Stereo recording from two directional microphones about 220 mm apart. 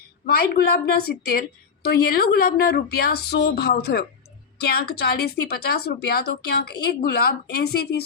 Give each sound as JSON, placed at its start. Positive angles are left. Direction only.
{"t": 0.3, "sound": "a woman's voice", "side_deg": 45}